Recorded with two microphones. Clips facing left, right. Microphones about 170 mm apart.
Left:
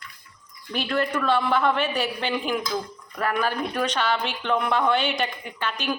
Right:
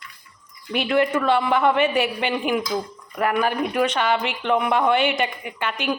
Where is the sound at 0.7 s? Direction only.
10° right (ahead or behind).